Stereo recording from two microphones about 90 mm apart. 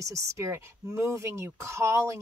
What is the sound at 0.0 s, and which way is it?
Speech, 35° right (ahead or behind).